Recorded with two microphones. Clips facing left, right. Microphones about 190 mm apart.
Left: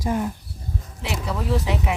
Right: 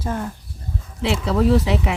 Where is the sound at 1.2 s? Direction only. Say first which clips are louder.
Right 7 dB; 70° right (ahead or behind).